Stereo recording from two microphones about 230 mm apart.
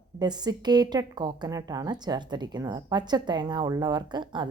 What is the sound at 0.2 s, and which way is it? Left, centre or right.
A woman's voice, centre.